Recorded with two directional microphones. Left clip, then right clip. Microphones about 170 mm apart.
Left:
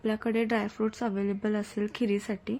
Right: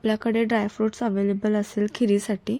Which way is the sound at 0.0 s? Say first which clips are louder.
Right 6 dB; 35° right (ahead or behind).